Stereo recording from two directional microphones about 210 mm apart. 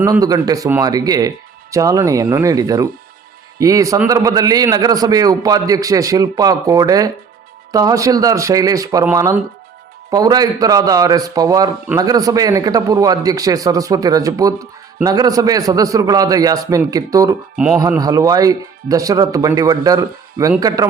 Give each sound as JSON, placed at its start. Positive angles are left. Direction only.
{"t": 0.0, "sound": "a man's voice", "side_deg": -15}